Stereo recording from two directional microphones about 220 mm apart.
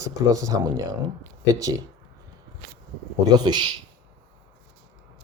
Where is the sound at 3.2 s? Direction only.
20° right (ahead or behind).